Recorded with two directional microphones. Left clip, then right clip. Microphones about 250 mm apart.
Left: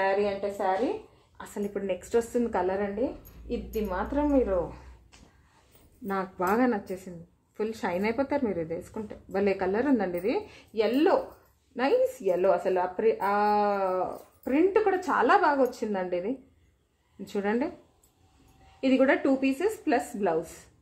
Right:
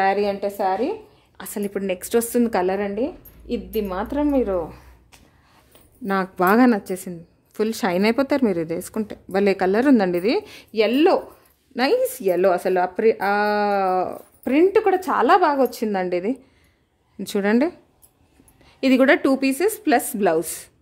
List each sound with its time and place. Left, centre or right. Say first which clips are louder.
0.0 s speech: right 6 dB; right
6.0 s speech: right 9 dB; right
18.8 s speech: right 7 dB; right